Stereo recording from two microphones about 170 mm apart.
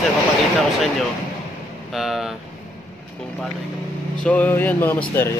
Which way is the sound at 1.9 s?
Centre (ahead or behind).